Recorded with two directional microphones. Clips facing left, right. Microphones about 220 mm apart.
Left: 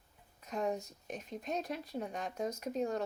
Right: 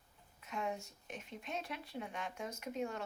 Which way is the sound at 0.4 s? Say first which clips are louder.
Left 5 dB; 40° left (ahead or behind).